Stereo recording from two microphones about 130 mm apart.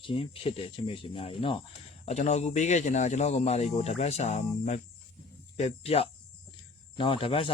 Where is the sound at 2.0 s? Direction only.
60° left (ahead or behind).